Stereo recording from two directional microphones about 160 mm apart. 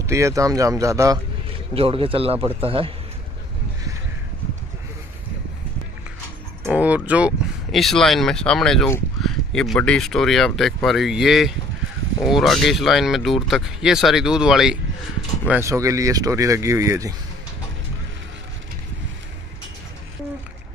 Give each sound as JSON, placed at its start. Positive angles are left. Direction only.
{"t": 0.0, "sound": "speech", "side_deg": -20}
{"t": 1.7, "sound": "speech", "side_deg": -35}
{"t": 6.7, "sound": "speech", "side_deg": -10}
{"t": 15.6, "sound": "speech", "side_deg": -20}